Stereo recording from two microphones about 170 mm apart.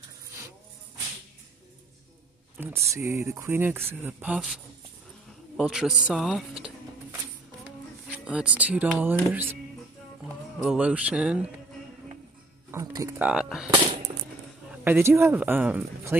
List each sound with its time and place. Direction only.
2.6 s speech: 15° right (ahead or behind)
5.6 s a man's voice: 5° right (ahead or behind)
12.7 s speech: 15° right (ahead or behind)
13.3 s speech: 5° right (ahead or behind)
14.7 s speech: 10° right (ahead or behind)